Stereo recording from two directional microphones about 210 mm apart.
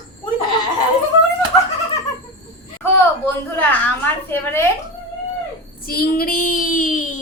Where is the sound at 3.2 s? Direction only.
10° left (ahead or behind).